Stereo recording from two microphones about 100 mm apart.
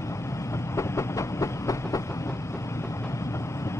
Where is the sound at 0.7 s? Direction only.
30° left (ahead or behind).